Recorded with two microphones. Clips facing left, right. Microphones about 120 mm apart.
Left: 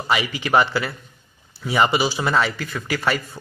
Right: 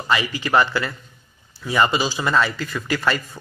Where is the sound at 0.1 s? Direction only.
15° left (ahead or behind).